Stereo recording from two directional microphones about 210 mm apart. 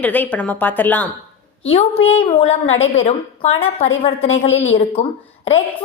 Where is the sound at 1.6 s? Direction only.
30° left (ahead or behind).